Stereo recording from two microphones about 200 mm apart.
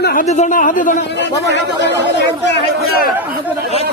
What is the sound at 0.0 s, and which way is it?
A man's voice, 45° left (ahead or behind).